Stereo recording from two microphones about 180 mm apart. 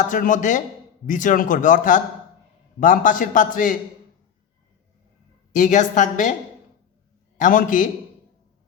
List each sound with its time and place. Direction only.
0.0 s a man's voice: 45° left (ahead or behind)
5.5 s a man's voice: 45° left (ahead or behind)
7.3 s a man's voice: 45° left (ahead or behind)